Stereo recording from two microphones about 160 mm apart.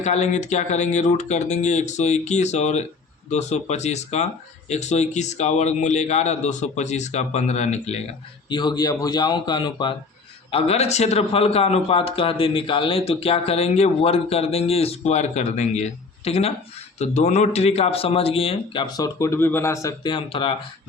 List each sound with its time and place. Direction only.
0.0 s a man's voice: 45° left (ahead or behind)
8.4 s speech: 30° left (ahead or behind)
10.5 s a man's voice: 40° left (ahead or behind); by 20.1 s 20° left (ahead or behind)
20.1 s a man's voice: 35° left (ahead or behind)